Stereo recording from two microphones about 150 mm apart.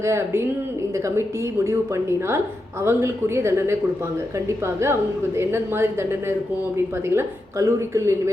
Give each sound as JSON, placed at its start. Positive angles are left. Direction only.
{"t": 0.0, "sound": "a woman's voice", "side_deg": -20}